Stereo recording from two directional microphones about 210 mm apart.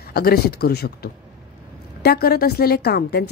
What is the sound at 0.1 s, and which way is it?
Speech, 45° left (ahead or behind).